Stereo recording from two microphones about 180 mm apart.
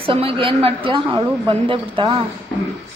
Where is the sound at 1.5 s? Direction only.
30° right (ahead or behind).